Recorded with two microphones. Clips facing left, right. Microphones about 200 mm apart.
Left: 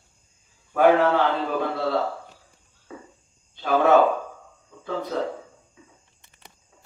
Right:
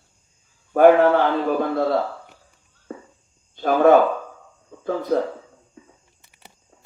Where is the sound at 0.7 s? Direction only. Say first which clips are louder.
Right 5 dB; 50° right (ahead or behind).